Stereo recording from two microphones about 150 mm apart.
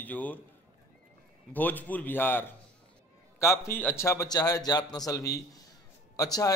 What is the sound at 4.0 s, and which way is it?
A man's voice, 20° left (ahead or behind).